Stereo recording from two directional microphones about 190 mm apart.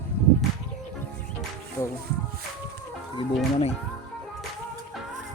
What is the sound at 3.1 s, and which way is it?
Speech, 35° left (ahead or behind).